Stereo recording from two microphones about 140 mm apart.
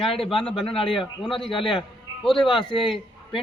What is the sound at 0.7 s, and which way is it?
Speech, 40° left (ahead or behind).